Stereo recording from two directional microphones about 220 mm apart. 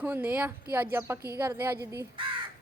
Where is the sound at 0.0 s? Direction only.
10° right (ahead or behind).